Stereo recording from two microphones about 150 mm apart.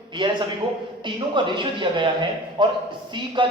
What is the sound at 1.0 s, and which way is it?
A man's voice, 30° right (ahead or behind).